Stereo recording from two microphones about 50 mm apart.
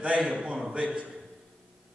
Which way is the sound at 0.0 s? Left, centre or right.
Right.